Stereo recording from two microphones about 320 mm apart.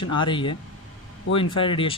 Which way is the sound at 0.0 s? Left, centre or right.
Centre.